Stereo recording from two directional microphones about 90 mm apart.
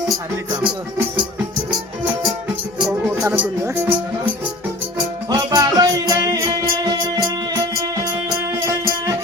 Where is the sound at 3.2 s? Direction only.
20° right (ahead or behind).